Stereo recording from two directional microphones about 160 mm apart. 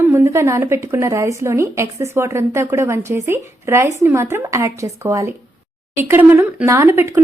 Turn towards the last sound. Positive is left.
turn(degrees=-15)  # may be behind; listen again after turning